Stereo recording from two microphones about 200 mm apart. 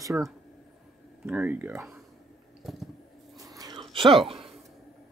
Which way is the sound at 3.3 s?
15° right (ahead or behind).